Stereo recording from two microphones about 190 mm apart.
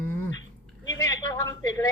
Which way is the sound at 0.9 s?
20° left (ahead or behind).